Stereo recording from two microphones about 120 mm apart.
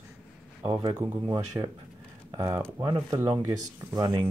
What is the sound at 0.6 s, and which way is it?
Speech, 30° right (ahead or behind).